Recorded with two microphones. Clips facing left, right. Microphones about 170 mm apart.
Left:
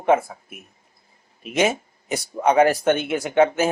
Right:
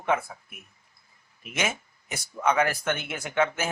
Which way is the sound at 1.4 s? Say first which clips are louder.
Left 10 dB; 25° left (ahead or behind).